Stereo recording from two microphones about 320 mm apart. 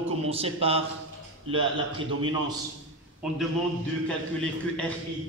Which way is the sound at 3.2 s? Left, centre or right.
Centre.